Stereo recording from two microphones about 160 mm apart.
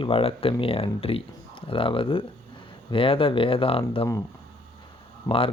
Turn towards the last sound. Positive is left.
turn(degrees=35)  # may be behind; listen again after turning